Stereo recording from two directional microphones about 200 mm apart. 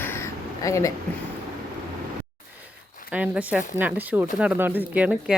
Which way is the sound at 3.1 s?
5° right (ahead or behind).